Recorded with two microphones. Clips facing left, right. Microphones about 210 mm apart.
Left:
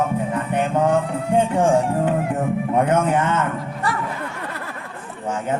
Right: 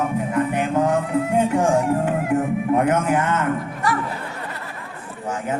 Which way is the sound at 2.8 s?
30° left (ahead or behind).